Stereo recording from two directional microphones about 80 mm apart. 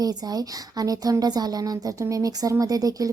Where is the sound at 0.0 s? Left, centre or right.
Right.